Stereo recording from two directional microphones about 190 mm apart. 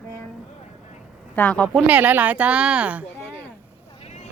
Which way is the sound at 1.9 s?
10° right (ahead or behind).